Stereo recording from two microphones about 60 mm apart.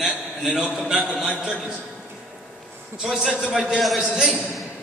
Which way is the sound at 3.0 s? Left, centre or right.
Centre.